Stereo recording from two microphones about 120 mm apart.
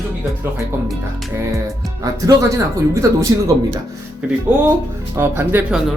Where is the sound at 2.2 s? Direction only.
25° right (ahead or behind).